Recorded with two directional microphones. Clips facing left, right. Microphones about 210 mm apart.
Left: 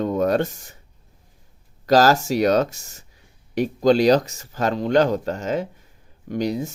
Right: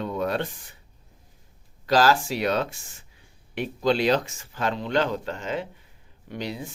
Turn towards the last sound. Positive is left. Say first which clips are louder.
# left 9 dB
turn(degrees=45)  # may be behind; listen again after turning